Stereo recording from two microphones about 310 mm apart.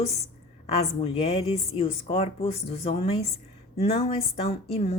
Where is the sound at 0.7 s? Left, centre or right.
Centre.